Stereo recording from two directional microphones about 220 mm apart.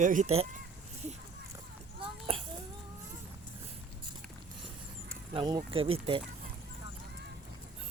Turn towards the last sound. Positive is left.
turn(degrees=-25)  # may be behind; listen again after turning